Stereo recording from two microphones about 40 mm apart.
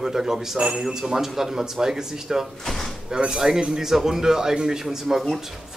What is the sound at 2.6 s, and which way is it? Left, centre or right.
Speech, centre.